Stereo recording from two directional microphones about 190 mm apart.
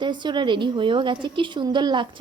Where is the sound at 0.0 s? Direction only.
25° right (ahead or behind).